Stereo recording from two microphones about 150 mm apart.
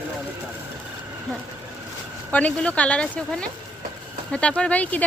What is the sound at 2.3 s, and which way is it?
Speech, 10° left (ahead or behind).